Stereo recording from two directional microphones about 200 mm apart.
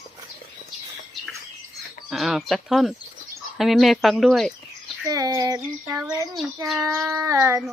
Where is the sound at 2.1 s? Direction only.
Centre (ahead or behind).